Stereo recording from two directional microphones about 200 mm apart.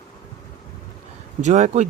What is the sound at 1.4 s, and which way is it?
Speech, 35° right (ahead or behind).